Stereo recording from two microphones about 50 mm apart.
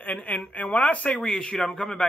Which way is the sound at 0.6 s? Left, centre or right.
Left.